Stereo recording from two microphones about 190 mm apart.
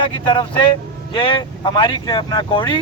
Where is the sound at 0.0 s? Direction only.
25° left (ahead or behind).